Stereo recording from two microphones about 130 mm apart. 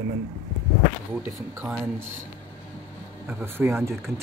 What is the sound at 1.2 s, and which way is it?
Speech, 10° right (ahead or behind).